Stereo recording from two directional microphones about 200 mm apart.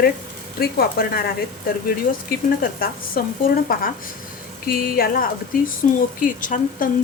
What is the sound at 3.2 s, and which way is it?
Speech, 50° left (ahead or behind).